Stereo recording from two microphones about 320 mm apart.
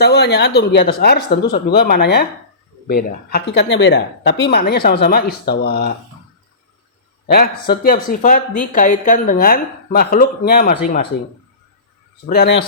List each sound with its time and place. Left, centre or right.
0.0 s speech: left
7.3 s speech: left
12.3 s speech: left